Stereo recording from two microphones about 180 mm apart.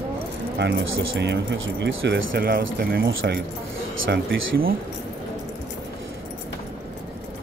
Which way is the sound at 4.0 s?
65° right (ahead or behind).